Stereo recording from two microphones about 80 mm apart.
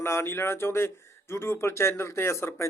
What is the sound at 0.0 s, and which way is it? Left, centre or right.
Speech, left.